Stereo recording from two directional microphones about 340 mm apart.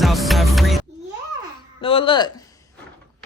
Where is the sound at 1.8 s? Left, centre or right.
Centre.